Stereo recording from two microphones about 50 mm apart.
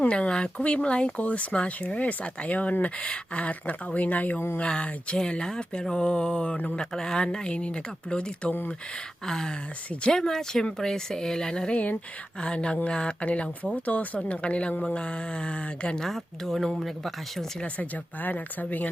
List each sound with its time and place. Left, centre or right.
0.1 s speech: centre
4.5 s speech: left
16.0 s speech: centre
18.2 s speech: left